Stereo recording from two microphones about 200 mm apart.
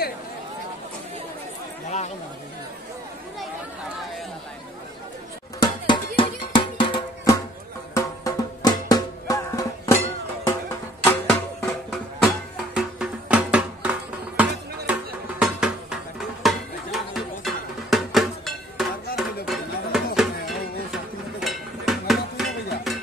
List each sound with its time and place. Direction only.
1.9 s chatter: 35° left (ahead or behind)
5.6 s music: 25° left (ahead or behind)
11.1 s music: 10° left (ahead or behind)
12.2 s music: centre (ahead or behind)